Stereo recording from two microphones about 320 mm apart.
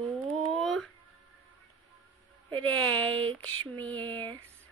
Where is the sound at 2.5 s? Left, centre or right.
Right.